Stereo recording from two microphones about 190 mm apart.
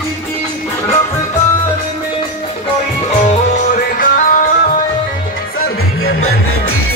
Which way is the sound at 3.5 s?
40° left (ahead or behind).